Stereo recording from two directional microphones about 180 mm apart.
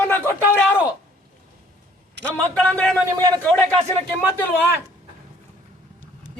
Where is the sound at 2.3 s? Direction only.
5° left (ahead or behind).